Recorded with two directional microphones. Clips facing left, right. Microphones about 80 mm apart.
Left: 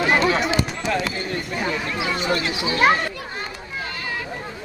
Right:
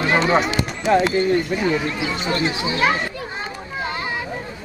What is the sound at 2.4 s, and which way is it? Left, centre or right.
Speech, right.